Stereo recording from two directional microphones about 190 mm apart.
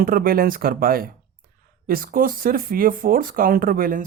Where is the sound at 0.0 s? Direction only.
50° right (ahead or behind).